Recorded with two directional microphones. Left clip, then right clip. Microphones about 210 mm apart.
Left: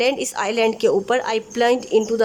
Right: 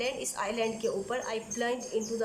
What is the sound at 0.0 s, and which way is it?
A woman's voice, 55° left (ahead or behind).